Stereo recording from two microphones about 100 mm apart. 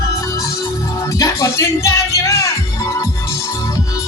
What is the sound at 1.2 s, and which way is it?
Music, 30° left (ahead or behind).